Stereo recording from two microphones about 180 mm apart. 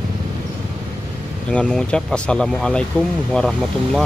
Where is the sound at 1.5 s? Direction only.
5° left (ahead or behind).